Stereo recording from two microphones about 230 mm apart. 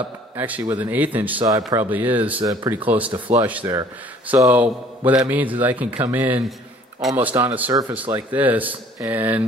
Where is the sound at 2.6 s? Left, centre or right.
Centre.